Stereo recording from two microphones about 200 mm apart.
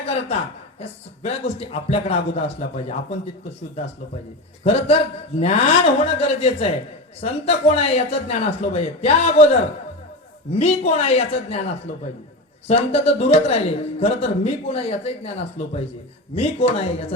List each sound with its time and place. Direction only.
0.0 s a woman's voice: 30° left (ahead or behind)
4.6 s speech: 30° left (ahead or behind)
12.6 s speech: 30° left (ahead or behind)